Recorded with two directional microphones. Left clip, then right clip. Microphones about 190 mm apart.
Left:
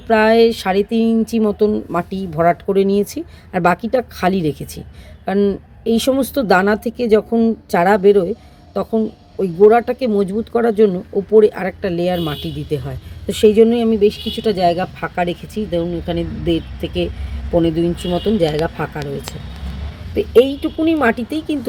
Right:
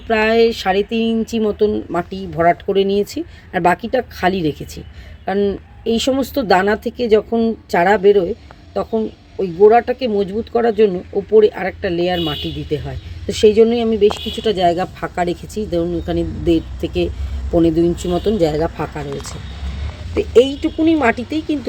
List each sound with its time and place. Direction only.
0.1 s speech: centre (ahead or behind)
20.1 s speech: 5° left (ahead or behind)